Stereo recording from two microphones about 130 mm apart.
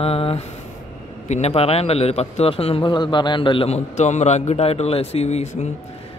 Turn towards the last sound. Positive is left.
turn(degrees=55)  # may be behind; listen again after turning